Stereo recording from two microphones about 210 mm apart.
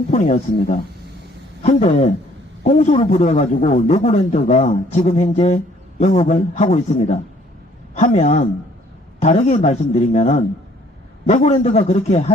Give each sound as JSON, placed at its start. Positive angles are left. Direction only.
{"t": 0.1, "sound": "a man's voice", "side_deg": 35}